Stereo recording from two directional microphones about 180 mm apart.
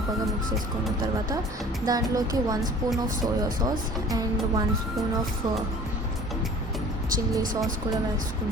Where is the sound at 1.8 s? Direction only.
20° right (ahead or behind).